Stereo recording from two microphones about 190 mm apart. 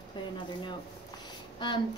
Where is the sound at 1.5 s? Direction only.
25° left (ahead or behind).